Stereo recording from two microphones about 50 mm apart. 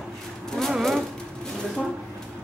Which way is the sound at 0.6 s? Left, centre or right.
Centre.